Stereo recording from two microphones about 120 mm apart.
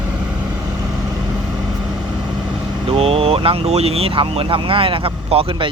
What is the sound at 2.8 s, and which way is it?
Speech, 50° right (ahead or behind).